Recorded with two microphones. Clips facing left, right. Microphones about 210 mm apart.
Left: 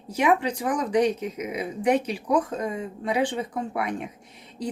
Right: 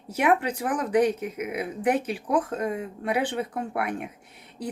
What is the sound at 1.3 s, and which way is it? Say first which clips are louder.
Speech: even; 55° right (ahead or behind).